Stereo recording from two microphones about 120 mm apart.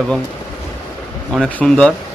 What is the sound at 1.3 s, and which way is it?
Speech, 5° left (ahead or behind).